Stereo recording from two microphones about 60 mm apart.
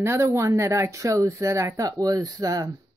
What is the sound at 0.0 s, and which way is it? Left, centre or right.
Speech, right.